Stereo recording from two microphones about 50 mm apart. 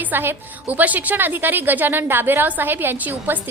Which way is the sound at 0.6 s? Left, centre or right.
Right.